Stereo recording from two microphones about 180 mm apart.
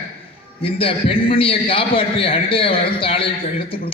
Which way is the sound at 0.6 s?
30° left (ahead or behind).